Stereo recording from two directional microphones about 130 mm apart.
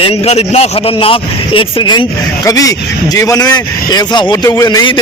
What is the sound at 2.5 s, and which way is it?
A man's voice, 25° left (ahead or behind).